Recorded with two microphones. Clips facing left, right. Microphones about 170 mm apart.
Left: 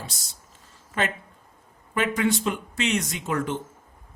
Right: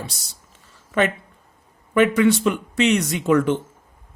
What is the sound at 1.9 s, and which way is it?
Speech, 70° right (ahead or behind).